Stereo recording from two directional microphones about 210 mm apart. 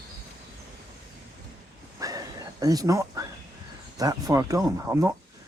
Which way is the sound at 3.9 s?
15° right (ahead or behind).